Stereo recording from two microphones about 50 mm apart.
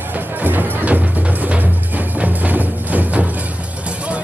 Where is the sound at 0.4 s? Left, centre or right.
Right.